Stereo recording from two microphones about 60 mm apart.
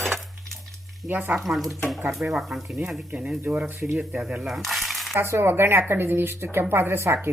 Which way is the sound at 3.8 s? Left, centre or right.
Centre.